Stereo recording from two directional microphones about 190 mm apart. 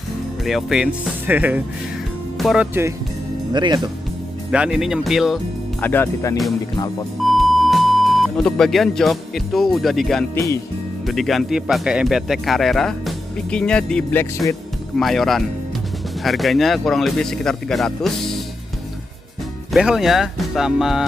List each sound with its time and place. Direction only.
0.5 s speech: centre (ahead or behind)
3.5 s speech: 20° right (ahead or behind)
4.5 s speech: 5° right (ahead or behind)
5.8 s speech: 10° left (ahead or behind)
7.2 s speech: centre (ahead or behind)
10.3 s speech: 15° left (ahead or behind)
11.1 s speech: centre (ahead or behind)
19.7 s speech: centre (ahead or behind)